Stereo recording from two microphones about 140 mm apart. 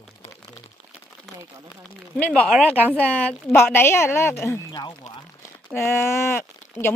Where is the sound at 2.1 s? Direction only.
10° left (ahead or behind).